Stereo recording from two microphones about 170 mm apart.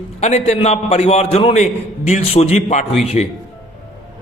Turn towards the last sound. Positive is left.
turn(degrees=45)  # may be behind; listen again after turning